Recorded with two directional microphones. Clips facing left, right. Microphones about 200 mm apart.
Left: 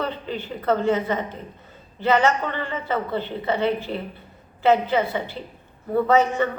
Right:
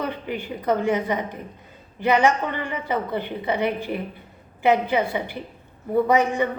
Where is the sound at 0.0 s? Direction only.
15° right (ahead or behind).